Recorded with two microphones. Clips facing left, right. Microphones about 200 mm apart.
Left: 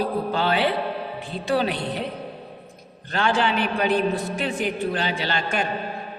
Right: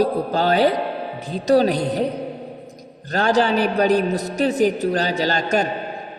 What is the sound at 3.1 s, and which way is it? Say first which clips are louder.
A man's voice: right 5 dB; 40° right (ahead or behind).